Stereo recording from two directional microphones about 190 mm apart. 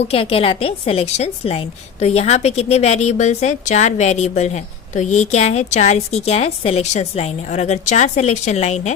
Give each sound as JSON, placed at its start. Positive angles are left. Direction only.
{"t": 0.1, "sound": "a woman's voice", "side_deg": 30}